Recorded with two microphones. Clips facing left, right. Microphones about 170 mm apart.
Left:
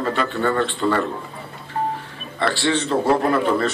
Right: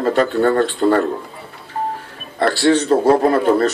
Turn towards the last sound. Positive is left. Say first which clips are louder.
# right 5 dB
turn(degrees=-40)  # may be behind; listen again after turning